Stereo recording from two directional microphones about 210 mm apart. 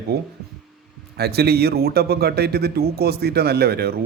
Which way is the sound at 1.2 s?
50° right (ahead or behind).